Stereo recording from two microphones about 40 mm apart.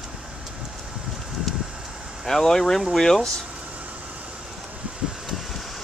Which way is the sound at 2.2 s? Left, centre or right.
Centre.